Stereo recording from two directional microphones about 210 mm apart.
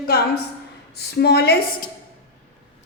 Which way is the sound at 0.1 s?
45° left (ahead or behind).